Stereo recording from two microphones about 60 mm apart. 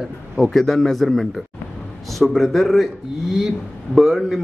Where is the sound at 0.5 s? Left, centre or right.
Centre.